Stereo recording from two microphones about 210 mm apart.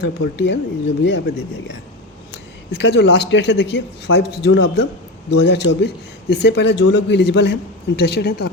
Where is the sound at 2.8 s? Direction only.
55° left (ahead or behind).